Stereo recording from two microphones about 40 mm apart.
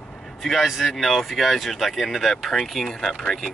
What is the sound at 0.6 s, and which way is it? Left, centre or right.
Speech, centre.